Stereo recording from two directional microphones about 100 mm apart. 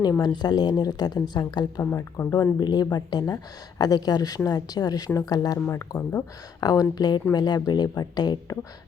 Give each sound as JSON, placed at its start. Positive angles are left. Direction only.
{"t": 0.0, "sound": "speech", "side_deg": 40}
{"t": 1.8, "sound": "speech", "side_deg": 20}
{"t": 2.6, "sound": "speech", "side_deg": 45}
{"t": 6.0, "sound": "speech", "side_deg": 15}
{"t": 6.6, "sound": "speech", "side_deg": 40}